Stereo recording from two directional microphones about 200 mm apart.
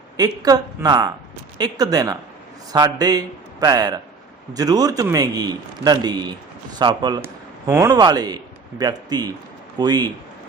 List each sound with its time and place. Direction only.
0.2 s a man's voice: 20° right (ahead or behind)